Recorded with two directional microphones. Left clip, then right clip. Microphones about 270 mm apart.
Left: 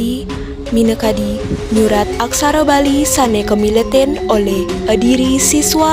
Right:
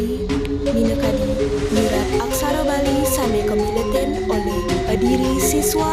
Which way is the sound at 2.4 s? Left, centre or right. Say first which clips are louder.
Left 12 dB; left.